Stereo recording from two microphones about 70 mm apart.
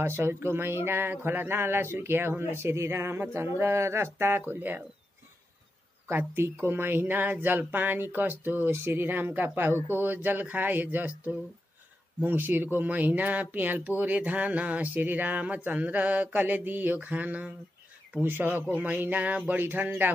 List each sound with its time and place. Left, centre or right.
0.0 s speech: right
6.0 s speech: right